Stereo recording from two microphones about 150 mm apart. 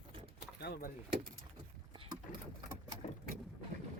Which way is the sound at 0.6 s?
90° left.